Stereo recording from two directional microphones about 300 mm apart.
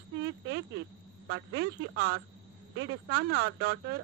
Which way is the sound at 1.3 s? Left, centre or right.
Right.